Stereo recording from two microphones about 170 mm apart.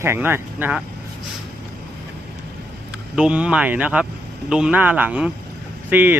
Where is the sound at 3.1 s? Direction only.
5° right (ahead or behind).